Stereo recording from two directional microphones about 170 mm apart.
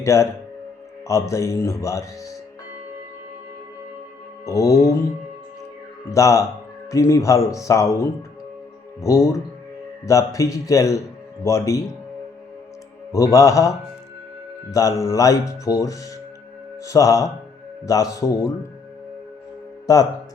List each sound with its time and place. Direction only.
0.0 s speech: 15° left (ahead or behind)
4.4 s speech: 20° left (ahead or behind)
6.1 s speech: 20° left (ahead or behind)
13.1 s speech: 20° left (ahead or behind)